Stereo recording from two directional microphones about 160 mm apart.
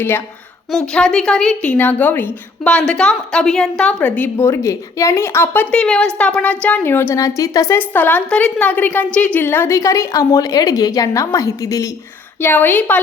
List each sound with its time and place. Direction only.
0.7 s a woman's voice: 5° left (ahead or behind)